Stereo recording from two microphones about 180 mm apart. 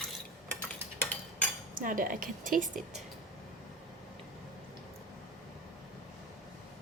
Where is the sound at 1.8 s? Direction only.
50° right (ahead or behind).